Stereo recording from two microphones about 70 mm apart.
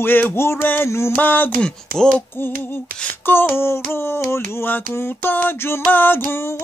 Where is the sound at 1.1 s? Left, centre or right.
Left.